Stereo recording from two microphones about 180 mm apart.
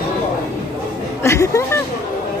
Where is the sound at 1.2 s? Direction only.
15° left (ahead or behind).